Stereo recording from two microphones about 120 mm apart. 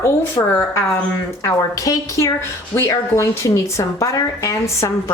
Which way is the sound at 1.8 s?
25° left (ahead or behind).